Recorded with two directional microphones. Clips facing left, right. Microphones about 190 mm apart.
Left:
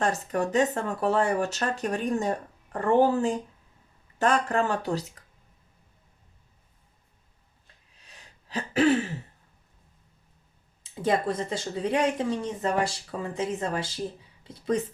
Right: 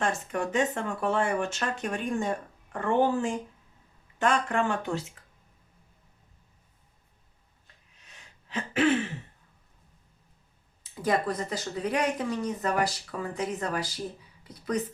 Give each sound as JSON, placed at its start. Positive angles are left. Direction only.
{"t": 0.0, "sound": "speech", "side_deg": 40}
{"t": 8.0, "sound": "throat clearing", "side_deg": 35}
{"t": 11.0, "sound": "speech", "side_deg": 25}